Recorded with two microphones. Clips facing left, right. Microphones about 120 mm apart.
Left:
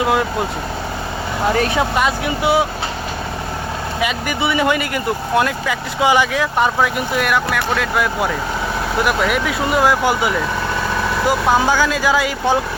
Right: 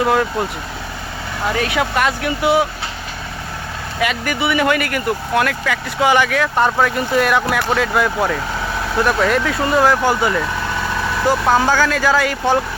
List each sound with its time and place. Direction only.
1.5 s speech: 35° left (ahead or behind)
1.8 s speech: 20° left (ahead or behind)
4.0 s speech: 20° left (ahead or behind)
6.6 s speech: 10° left (ahead or behind)